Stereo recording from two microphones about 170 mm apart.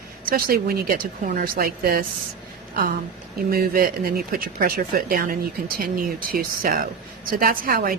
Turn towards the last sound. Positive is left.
turn(degrees=-55)  # may be behind; listen again after turning